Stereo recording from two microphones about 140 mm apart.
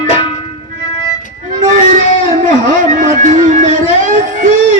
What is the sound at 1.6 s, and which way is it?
Music, 65° right (ahead or behind).